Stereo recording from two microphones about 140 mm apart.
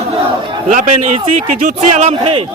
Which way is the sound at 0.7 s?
65° right (ahead or behind).